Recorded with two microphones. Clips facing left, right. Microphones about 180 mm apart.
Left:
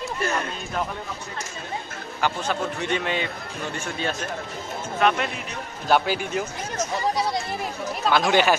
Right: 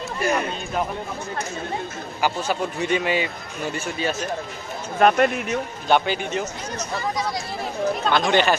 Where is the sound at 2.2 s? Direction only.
10° right (ahead or behind).